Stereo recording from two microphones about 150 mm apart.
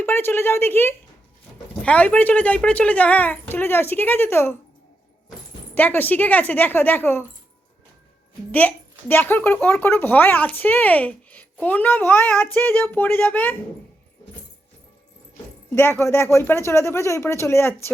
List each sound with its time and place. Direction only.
0.0 s a woman's voice: 15° left (ahead or behind)
5.7 s speech: 10° left (ahead or behind)
8.5 s speech: 10° left (ahead or behind)
15.7 s speech: 15° left (ahead or behind)